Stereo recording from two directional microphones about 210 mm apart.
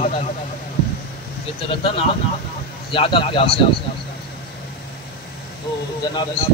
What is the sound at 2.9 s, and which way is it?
Speech, 25° left (ahead or behind).